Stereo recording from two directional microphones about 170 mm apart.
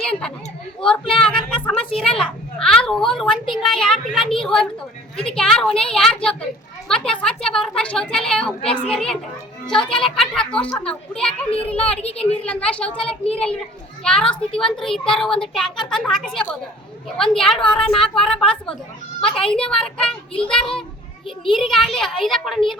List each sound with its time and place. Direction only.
0.0 s a sound: 5° left (ahead or behind)
5.1 s a woman's voice: 5° left (ahead or behind)
8.6 s a woman's voice: 35° left (ahead or behind)
8.9 s a woman's voice: 5° left (ahead or behind)
12.0 s a woman's voice: 35° left (ahead or behind)
12.5 s a woman's voice: 10° left (ahead or behind)
14.0 s a woman's voice: 5° left (ahead or behind)